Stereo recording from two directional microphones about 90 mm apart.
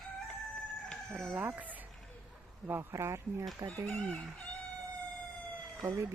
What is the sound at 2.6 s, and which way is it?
Speech, 30° right (ahead or behind).